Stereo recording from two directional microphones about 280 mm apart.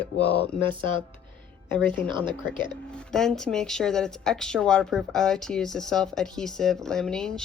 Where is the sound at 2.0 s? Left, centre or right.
Centre.